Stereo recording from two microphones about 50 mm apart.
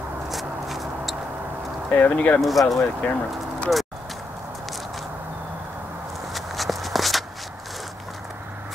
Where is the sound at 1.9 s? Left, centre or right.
Left.